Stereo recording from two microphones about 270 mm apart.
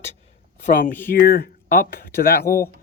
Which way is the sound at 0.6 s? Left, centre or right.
Left.